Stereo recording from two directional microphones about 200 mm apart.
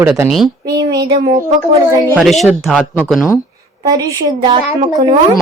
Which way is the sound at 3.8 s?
20° right (ahead or behind).